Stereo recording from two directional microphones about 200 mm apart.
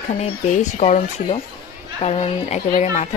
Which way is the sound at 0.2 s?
35° left (ahead or behind).